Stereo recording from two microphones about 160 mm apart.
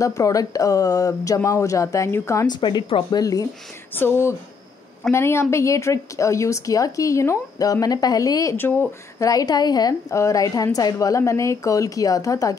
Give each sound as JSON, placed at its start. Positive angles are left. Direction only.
{"t": 0.0, "sound": "a woman's voice", "side_deg": 20}
{"t": 5.1, "sound": "a woman's voice", "side_deg": 15}